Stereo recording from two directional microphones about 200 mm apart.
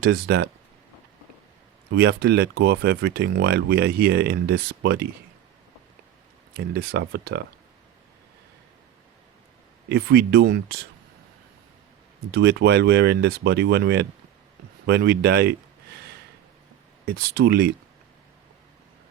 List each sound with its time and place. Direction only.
0.0 s speech: 55° right (ahead or behind)
1.9 s speech: 55° right (ahead or behind)
6.5 s speech: 55° right (ahead or behind)
9.9 s speech: 55° right (ahead or behind)
12.3 s speech: 55° right (ahead or behind)
17.1 s speech: 50° right (ahead or behind)